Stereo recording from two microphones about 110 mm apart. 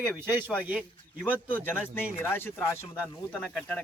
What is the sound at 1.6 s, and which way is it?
Speech, 20° left (ahead or behind).